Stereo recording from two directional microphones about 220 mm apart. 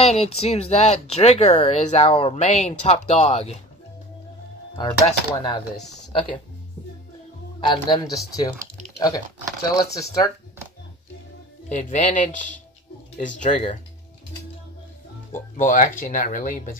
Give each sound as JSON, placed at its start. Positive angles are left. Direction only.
{"t": 0.0, "sound": "speech", "side_deg": 30}
{"t": 4.7, "sound": "speech", "side_deg": 20}
{"t": 7.6, "sound": "speech", "side_deg": 20}
{"t": 11.7, "sound": "speech", "side_deg": 35}
{"t": 15.5, "sound": "speech", "side_deg": 35}